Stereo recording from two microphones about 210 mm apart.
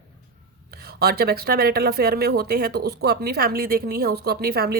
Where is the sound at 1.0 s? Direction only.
45° right (ahead or behind).